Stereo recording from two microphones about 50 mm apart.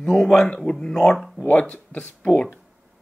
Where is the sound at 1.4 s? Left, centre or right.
Left.